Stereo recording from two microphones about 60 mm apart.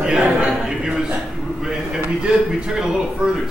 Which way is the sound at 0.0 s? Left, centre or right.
Centre.